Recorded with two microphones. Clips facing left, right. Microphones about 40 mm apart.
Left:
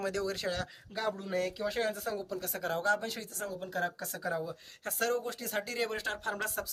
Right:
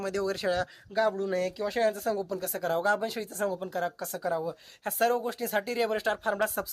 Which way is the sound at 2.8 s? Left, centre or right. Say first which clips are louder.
Right 3 dB; centre.